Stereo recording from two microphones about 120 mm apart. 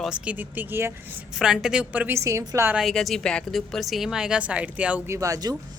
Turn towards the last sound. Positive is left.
turn(degrees=-30)  # may be behind; listen again after turning